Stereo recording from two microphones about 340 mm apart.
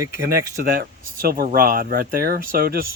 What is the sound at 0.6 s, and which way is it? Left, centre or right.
Speech, right.